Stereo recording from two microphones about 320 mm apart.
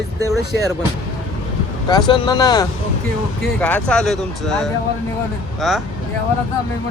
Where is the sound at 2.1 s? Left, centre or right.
Centre.